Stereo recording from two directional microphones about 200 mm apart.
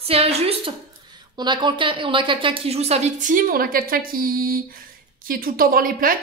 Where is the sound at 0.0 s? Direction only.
30° right (ahead or behind).